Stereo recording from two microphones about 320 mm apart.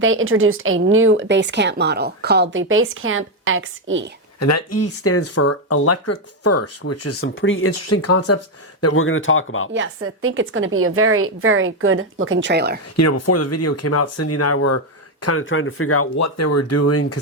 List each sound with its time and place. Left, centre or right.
0.0 s speech: right
4.4 s speech: left
7.7 s speech: left
9.7 s speech: right
13.0 s speech: left